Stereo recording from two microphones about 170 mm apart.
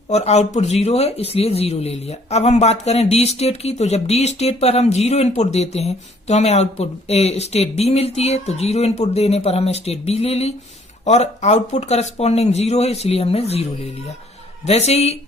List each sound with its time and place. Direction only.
0.1 s speech: 40° left (ahead or behind)
14.7 s speech: 40° left (ahead or behind)